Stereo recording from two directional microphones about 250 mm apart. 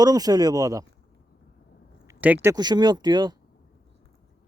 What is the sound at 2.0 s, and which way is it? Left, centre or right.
Speech, centre.